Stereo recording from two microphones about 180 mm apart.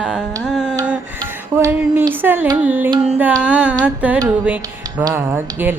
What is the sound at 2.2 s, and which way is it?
Speech, 10° right (ahead or behind).